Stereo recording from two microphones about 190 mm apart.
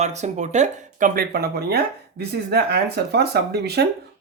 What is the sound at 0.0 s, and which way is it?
Speech, 35° right (ahead or behind).